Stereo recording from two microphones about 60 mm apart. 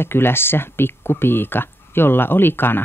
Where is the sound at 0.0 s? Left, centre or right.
Left.